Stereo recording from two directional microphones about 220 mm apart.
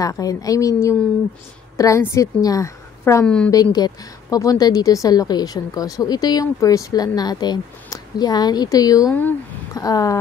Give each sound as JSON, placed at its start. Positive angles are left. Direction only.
{"t": 0.0, "sound": "a woman's voice", "side_deg": 15}